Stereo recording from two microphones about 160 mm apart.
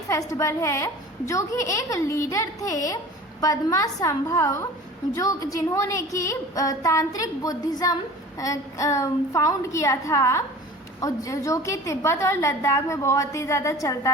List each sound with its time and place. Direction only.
0.1 s a woman's voice: 20° left (ahead or behind)